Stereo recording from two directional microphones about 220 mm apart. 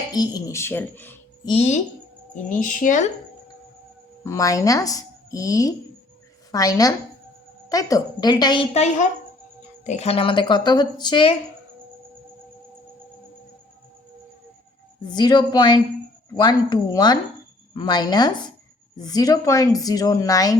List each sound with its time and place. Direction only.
0.1 s speech: 15° left (ahead or behind)
1.5 s speech: 30° left (ahead or behind)
4.2 s speech: 15° left (ahead or behind)
15.1 s speech: 20° left (ahead or behind)